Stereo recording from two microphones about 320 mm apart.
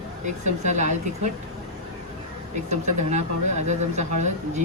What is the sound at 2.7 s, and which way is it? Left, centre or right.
Speech, right.